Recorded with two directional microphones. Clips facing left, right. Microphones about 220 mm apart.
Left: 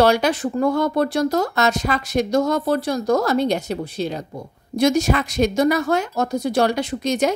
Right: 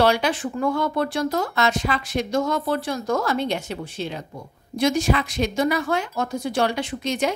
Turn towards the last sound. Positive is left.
turn(degrees=40)  # may be behind; listen again after turning